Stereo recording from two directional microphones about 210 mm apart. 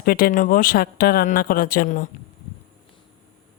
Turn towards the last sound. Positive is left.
turn(degrees=40)  # may be behind; listen again after turning